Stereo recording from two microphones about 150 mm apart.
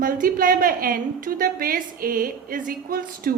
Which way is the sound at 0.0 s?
70° right (ahead or behind).